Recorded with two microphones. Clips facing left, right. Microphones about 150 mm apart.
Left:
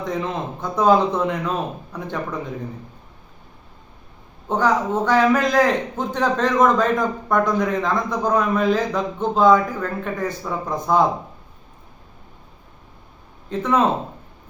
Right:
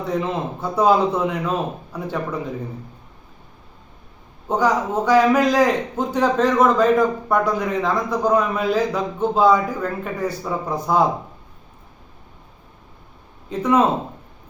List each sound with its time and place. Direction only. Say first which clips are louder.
0.0 s a man's voice: right 2 dB; 10° right (ahead or behind)
4.4 s a man's voice: even; 10° right (ahead or behind)
13.5 s a man's voice: right 2 dB; 10° right (ahead or behind)